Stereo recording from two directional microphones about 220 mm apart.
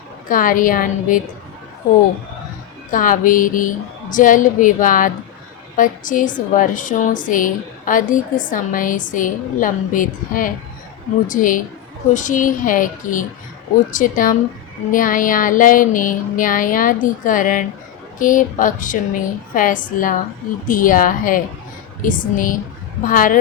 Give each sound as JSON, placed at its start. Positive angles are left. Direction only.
{"t": 0.3, "sound": "a woman's voice", "side_deg": 40}
{"t": 2.9, "sound": "a woman's voice", "side_deg": 35}